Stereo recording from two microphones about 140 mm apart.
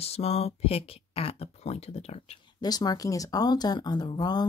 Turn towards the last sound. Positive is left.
turn(degrees=30)  # may be behind; listen again after turning